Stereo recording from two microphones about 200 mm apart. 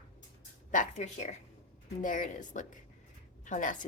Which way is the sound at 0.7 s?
40° left (ahead or behind).